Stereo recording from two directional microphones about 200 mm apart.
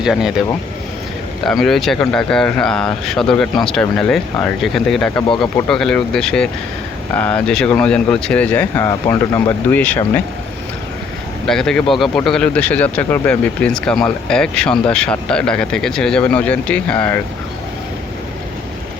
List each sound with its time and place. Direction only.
0.0 s speech: centre (ahead or behind)
1.5 s speech: centre (ahead or behind)
11.4 s speech: centre (ahead or behind)